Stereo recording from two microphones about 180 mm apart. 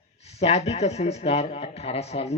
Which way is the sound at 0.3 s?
35° left (ahead or behind).